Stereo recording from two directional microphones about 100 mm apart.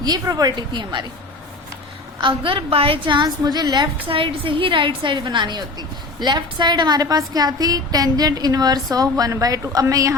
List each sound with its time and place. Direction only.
0.0 s a woman's voice: 40° right (ahead or behind)
2.2 s a woman's voice: 60° right (ahead or behind)
4.1 s a woman's voice: 65° right (ahead or behind); by 10.2 s 35° right (ahead or behind)